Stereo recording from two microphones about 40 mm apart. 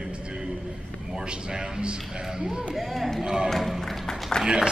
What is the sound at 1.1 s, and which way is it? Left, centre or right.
A man's voice, right.